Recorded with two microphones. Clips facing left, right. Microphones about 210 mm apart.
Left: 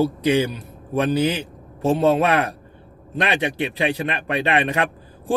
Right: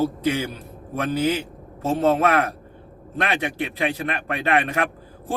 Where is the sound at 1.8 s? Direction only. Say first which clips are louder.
Left 2 dB; 15° left (ahead or behind).